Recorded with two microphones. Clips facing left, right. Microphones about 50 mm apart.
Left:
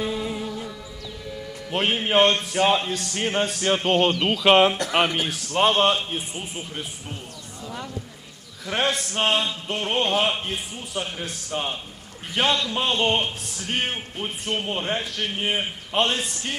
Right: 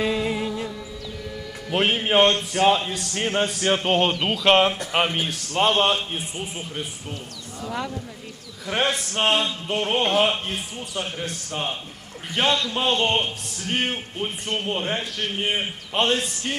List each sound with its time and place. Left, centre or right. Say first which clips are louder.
0.0 s music: right 4 dB; right
1.7 s a man's voice: right 2 dB; right
2.1 s a man's voice: even; centre
8.6 s a man's voice: right 1 dB; centre